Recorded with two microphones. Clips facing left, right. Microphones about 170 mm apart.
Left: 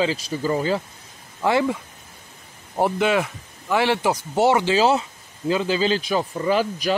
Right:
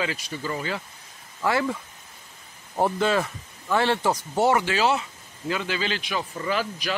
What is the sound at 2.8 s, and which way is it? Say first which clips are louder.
Speech: left 3 dB; 15° left (ahead or behind).